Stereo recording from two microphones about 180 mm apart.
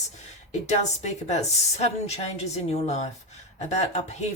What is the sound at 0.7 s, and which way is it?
Speech, 40° left (ahead or behind).